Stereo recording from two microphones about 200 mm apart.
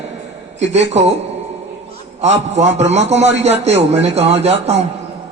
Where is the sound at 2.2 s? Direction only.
35° right (ahead or behind).